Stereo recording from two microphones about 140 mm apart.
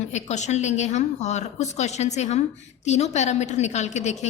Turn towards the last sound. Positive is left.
turn(degrees=55)  # may be behind; listen again after turning